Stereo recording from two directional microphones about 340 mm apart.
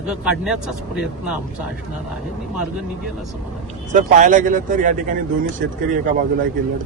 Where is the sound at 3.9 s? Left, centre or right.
Right.